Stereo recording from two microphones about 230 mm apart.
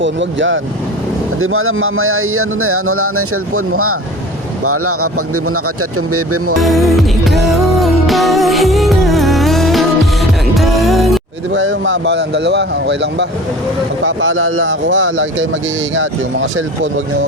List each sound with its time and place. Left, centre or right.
0.0 s speech: right
6.6 s music: centre
11.5 s speech: right